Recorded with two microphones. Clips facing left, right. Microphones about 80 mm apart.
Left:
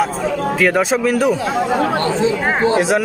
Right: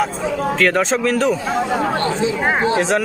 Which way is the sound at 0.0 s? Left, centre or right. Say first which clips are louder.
Left 2 dB; centre.